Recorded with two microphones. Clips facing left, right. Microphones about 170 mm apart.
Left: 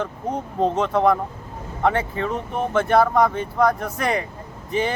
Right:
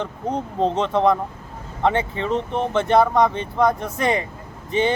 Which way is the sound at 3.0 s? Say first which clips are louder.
Even; centre (ahead or behind).